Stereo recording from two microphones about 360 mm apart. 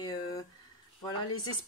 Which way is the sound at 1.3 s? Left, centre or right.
Left.